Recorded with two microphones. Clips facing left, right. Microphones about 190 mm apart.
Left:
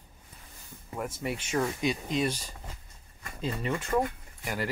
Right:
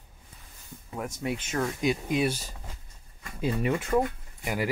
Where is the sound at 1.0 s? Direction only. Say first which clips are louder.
Right 2 dB; 5° left (ahead or behind).